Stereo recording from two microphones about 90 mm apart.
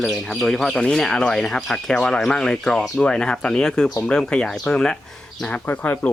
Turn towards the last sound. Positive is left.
turn(degrees=20)  # may be behind; listen again after turning